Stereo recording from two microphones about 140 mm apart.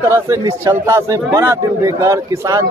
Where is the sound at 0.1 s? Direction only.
20° right (ahead or behind).